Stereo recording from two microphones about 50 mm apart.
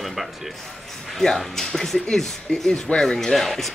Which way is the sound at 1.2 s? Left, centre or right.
Centre.